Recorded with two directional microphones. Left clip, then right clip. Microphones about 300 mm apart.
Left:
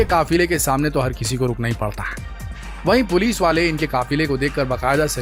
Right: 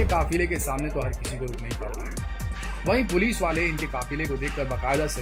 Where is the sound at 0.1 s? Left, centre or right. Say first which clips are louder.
Left 8 dB; left.